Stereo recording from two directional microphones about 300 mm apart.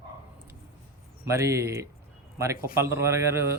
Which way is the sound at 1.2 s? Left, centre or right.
Centre.